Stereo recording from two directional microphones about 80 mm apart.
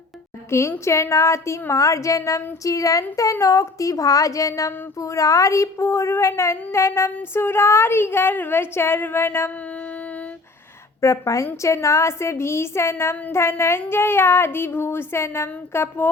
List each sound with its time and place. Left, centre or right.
0.5 s child singing: left
2.6 s speech: left
4.9 s child singing: left
9.6 s a sound: centre
11.0 s child singing: left